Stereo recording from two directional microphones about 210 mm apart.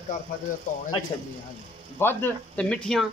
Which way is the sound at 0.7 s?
40° left (ahead or behind).